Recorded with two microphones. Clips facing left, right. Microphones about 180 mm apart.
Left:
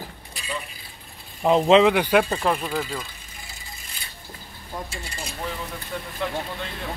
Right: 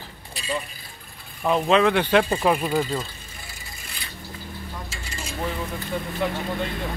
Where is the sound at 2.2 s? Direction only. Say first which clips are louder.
Right 3 dB; 10° right (ahead or behind).